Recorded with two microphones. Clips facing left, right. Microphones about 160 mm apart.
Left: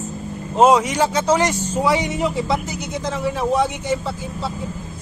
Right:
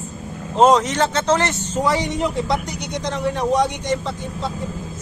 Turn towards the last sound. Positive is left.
turn(degrees=5)  # may be behind; listen again after turning